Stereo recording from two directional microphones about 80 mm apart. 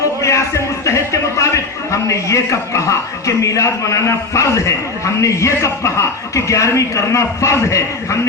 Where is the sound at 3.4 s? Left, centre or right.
Left.